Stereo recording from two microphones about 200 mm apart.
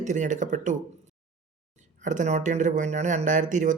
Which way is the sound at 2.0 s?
40° right (ahead or behind).